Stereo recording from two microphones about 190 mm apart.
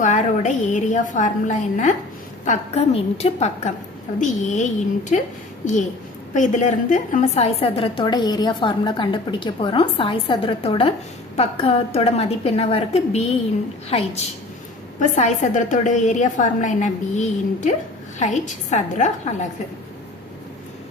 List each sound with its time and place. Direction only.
0.0 s a woman's voice: 40° left (ahead or behind)
6.3 s a woman's voice: 40° left (ahead or behind)
14.9 s a woman's voice: 40° left (ahead or behind)